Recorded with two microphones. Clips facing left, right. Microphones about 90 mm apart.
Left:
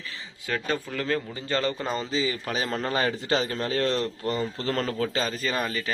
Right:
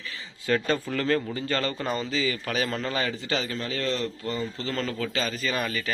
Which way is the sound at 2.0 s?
30° left (ahead or behind).